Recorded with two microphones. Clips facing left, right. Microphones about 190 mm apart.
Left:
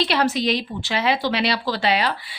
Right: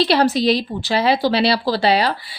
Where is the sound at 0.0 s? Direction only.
35° right (ahead or behind).